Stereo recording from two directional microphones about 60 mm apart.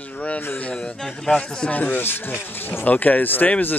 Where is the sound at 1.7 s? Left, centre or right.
Left.